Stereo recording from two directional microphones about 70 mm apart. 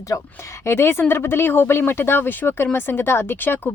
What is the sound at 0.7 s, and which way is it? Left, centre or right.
Speech, left.